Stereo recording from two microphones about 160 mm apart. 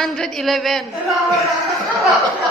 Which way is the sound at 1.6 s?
Centre (ahead or behind).